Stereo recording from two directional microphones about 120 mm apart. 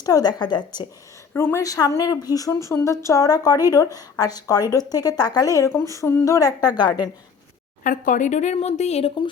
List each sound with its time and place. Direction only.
0.0 s a woman's voice: 35° left (ahead or behind)
1.3 s a woman's voice: 20° left (ahead or behind); by 6.9 s 35° left (ahead or behind)
7.9 s speech: 90° left; by 9.1 s 60° left (ahead or behind)